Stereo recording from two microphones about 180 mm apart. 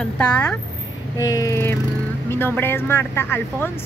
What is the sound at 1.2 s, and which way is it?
Vehicle, 20° left (ahead or behind).